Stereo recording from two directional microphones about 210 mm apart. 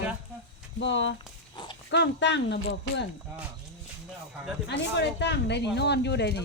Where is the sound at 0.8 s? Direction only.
60° left (ahead or behind).